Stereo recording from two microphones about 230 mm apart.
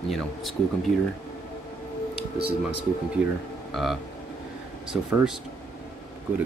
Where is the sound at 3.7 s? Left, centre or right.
Centre.